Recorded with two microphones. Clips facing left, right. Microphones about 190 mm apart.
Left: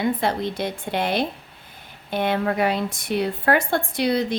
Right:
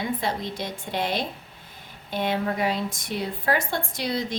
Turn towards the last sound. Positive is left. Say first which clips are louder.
# left 6 dB
turn(degrees=60)  # may be behind; listen again after turning